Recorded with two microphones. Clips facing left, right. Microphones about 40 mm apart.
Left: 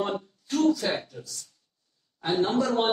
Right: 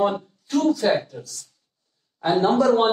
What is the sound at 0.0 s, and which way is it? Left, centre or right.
A man's voice, centre.